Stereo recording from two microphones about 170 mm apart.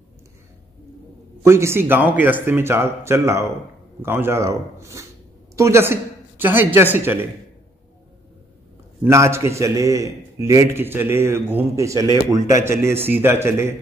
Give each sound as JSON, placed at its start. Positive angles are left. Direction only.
{"t": 1.4, "sound": "a man's voice", "side_deg": -15}
{"t": 9.0, "sound": "a man's voice", "side_deg": -15}